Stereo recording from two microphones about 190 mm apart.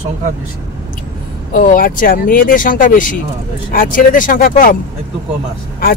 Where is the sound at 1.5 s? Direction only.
45° left (ahead or behind).